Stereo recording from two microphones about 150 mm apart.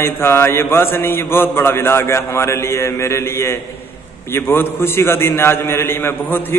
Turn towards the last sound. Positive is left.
turn(degrees=15)  # may be behind; listen again after turning